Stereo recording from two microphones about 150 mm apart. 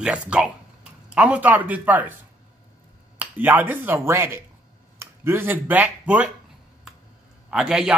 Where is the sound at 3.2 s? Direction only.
10° right (ahead or behind).